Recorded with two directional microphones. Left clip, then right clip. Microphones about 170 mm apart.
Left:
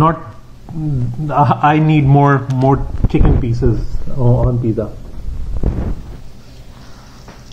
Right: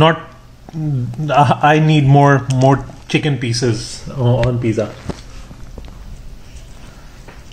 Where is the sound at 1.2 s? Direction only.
40° right (ahead or behind).